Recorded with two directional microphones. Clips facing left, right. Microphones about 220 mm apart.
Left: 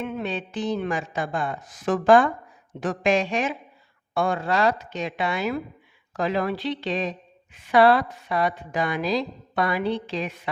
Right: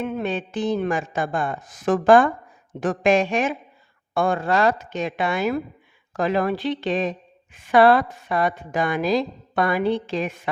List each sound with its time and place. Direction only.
0.0 s a woman's voice: 45° right (ahead or behind)